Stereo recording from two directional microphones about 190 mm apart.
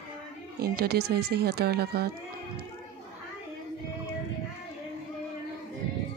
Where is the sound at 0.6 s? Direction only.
55° right (ahead or behind).